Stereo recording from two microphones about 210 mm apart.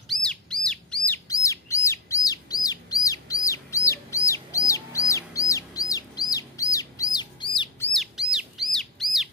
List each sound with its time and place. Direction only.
0.1 s bird: 5° left (ahead or behind); by 7.7 s 20° left (ahead or behind)
7.9 s bird: centre (ahead or behind)